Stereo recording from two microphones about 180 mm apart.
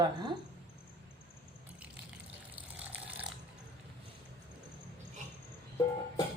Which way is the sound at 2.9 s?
10° right (ahead or behind).